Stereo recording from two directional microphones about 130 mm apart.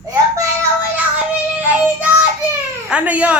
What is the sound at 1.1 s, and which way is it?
Child singing, 10° right (ahead or behind).